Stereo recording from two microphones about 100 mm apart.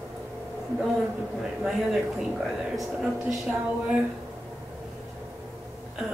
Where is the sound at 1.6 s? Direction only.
5° right (ahead or behind).